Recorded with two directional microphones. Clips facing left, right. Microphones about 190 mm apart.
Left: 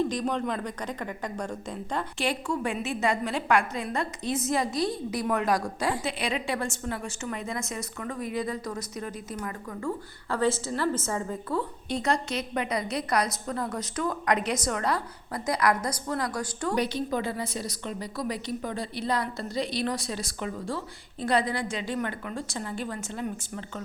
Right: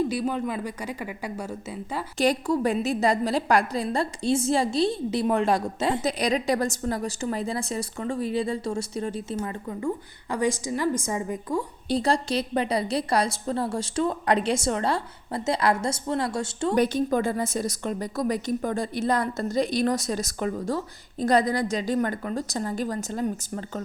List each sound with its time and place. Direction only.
0.0 s speech: 10° right (ahead or behind)
2.1 s a woman's voice: 40° right (ahead or behind); by 6.0 s 25° right (ahead or behind)
6.0 s a woman's voice: 40° right (ahead or behind); by 11.6 s 15° right (ahead or behind)
11.9 s a woman's voice: 35° right (ahead or behind)
16.7 s a woman's voice: 45° right (ahead or behind)